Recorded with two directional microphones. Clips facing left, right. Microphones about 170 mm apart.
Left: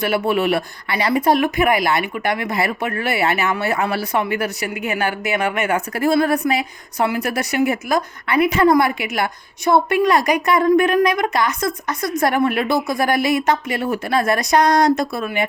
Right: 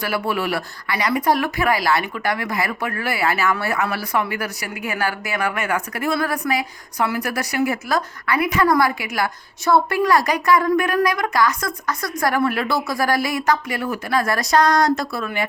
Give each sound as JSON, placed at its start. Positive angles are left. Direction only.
{"t": 0.0, "sound": "speech", "side_deg": 25}